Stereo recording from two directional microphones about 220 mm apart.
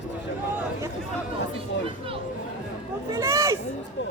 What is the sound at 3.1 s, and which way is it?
Speech, 15° right (ahead or behind).